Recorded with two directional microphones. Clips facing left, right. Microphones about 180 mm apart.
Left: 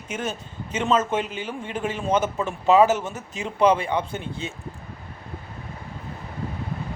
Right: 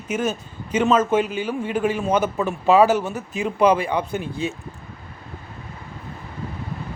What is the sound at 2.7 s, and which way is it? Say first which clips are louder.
Speech: right 1 dB; 20° left (ahead or behind).